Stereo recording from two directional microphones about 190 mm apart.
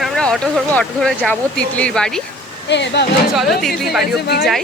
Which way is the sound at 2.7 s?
65° left (ahead or behind).